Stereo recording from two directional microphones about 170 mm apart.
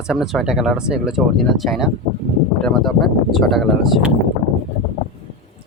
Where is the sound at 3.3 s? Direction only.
Centre (ahead or behind).